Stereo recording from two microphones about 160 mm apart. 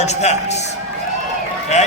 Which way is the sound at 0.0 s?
45° left (ahead or behind).